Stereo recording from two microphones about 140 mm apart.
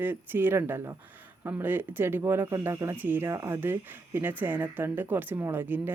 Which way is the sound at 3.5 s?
15° right (ahead or behind).